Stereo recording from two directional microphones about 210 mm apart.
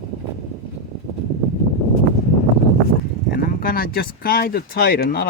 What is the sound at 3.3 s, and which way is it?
Speech, 45° left (ahead or behind).